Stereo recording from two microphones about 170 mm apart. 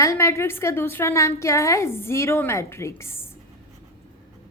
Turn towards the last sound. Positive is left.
turn(degrees=15)  # may be behind; listen again after turning